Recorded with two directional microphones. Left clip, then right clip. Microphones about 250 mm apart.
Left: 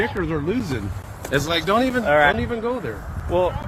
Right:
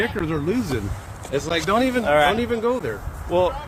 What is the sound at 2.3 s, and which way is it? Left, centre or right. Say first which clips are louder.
Speech: right 3 dB; right.